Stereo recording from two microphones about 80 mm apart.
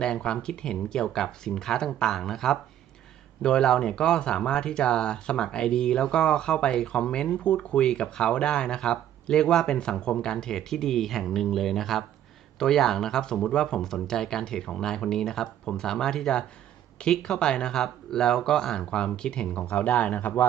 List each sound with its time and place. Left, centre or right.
0.0 s speech: centre